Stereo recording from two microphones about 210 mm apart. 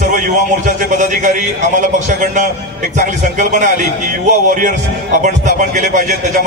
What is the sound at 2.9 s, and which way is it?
A man's voice, 35° right (ahead or behind).